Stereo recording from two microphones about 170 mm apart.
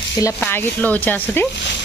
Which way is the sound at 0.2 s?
10° left (ahead or behind).